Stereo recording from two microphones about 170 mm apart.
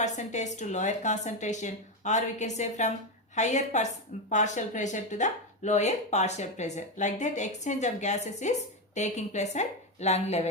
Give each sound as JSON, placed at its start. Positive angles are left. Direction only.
{"t": 0.0, "sound": "speech", "side_deg": 45}